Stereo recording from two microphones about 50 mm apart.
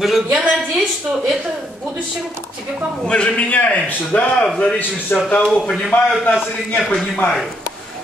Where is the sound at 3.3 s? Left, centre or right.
Left.